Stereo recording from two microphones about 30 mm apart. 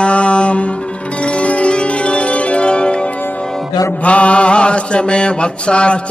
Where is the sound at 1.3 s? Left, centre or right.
Left.